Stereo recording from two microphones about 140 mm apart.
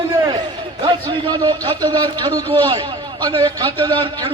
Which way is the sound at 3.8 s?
30° right (ahead or behind).